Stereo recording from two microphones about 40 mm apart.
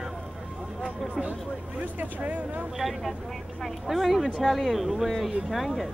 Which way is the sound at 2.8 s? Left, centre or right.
Centre.